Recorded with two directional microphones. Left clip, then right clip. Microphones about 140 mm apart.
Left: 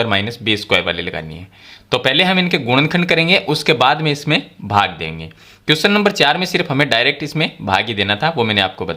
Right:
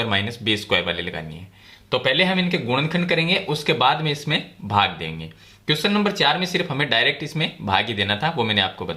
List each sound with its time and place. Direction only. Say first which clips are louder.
0.0 s speech: left 5 dB; 45° left (ahead or behind)
1.9 s speech: left 5 dB; 65° left (ahead or behind); by 5.1 s 45° left (ahead or behind)
5.6 s speech: left 7 dB; 65° left (ahead or behind); by 9.0 s 45° left (ahead or behind)